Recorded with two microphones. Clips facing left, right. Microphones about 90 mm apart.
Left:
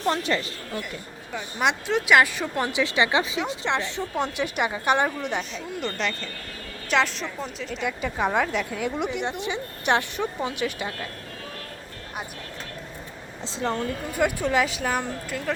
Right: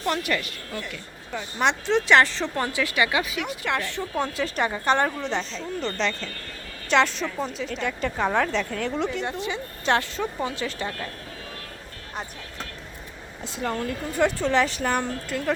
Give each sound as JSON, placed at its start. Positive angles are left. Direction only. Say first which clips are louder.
{"t": 0.0, "sound": "a woman's voice", "louder": "left 1 dB", "side_deg": 25}
{"t": 1.3, "sound": "a woman's voice", "louder": "right 1 dB", "side_deg": 5}
{"t": 13.4, "sound": "a woman's voice", "louder": "left 1 dB", "side_deg": 25}
{"t": 14.1, "sound": "a woman's voice", "louder": "right 2 dB", "side_deg": 10}